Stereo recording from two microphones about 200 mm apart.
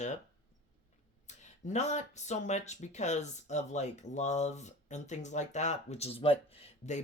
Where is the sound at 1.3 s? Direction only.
35° left (ahead or behind).